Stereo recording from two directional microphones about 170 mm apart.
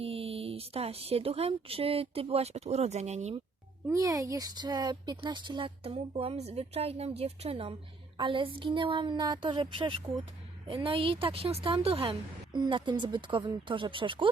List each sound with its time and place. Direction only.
0.0 s a woman's voice: 35° right (ahead or behind)
3.8 s a woman's voice: 20° right (ahead or behind)